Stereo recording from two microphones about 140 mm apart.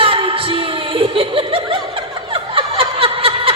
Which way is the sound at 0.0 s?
40° right (ahead or behind).